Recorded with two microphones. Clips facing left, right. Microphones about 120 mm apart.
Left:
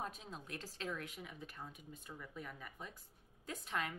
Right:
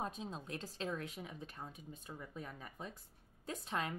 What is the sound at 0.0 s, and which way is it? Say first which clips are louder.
A woman's voice: right 4 dB; 25° right (ahead or behind).